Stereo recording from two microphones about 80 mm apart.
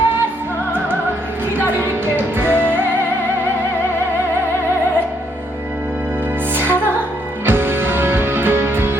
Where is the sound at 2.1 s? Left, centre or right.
Right.